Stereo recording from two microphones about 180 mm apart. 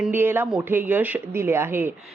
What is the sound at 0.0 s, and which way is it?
Speech, 10° right (ahead or behind).